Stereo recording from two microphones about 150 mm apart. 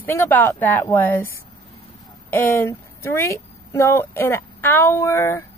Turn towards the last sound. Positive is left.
turn(degrees=15)  # may be behind; listen again after turning